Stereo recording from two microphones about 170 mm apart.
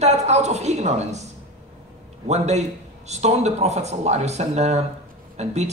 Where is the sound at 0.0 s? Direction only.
40° right (ahead or behind).